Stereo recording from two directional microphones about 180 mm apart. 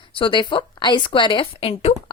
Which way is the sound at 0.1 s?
25° left (ahead or behind).